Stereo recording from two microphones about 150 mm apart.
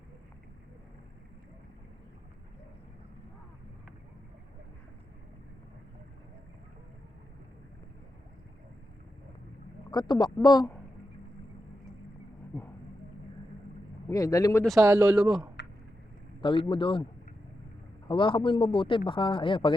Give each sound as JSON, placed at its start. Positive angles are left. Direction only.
{"t": 9.9, "sound": "speech", "side_deg": 30}
{"t": 14.1, "sound": "speech", "side_deg": 20}
{"t": 14.9, "sound": "speech", "side_deg": -5}
{"t": 16.4, "sound": "a man's voice", "side_deg": 35}
{"t": 18.1, "sound": "a man's voice", "side_deg": 35}